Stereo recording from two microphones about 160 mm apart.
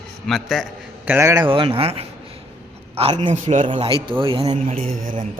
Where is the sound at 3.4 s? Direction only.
50° right (ahead or behind).